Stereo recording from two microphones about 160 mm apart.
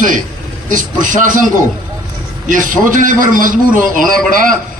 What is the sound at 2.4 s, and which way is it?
A man's voice, 55° right (ahead or behind).